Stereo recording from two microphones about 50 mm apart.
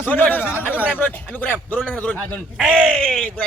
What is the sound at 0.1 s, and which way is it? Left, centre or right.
Speech, left.